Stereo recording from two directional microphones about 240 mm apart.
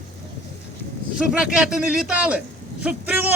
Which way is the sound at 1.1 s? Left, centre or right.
Centre.